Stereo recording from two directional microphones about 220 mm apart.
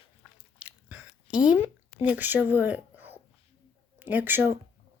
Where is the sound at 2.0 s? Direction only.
5° right (ahead or behind).